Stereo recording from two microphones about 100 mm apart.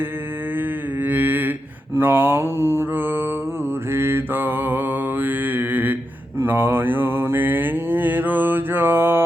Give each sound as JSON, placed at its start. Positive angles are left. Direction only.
{"t": 1.0, "sound": "mantra", "side_deg": -20}